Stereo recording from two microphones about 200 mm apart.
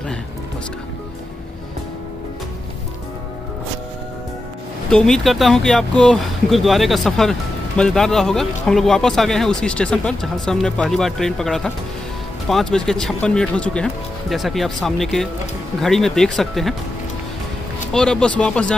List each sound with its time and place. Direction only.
4.8 s speech: 5° left (ahead or behind)
17.9 s speech: 5° left (ahead or behind)